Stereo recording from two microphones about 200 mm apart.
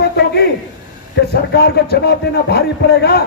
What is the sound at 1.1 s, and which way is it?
A man's voice, 55° left (ahead or behind).